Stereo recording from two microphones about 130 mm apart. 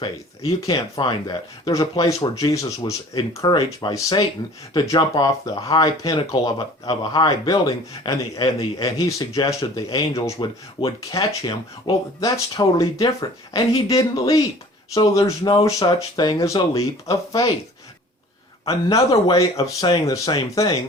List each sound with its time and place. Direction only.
0.0 s speech: 25° left (ahead or behind)
18.7 s speech: 25° left (ahead or behind)